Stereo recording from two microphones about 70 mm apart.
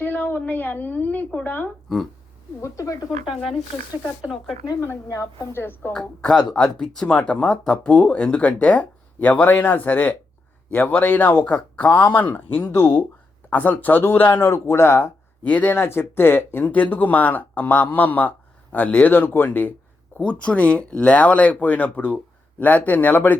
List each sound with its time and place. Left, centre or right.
0.0 s a woman's voice: left
2.6 s a woman's voice: left
5.0 s a woman's voice: left
5.5 s speech: left
5.9 s speech: centre; by 14.3 s left
14.3 s speech: left
15.4 s speech: left
15.8 s speech: left
20.1 s speech: centre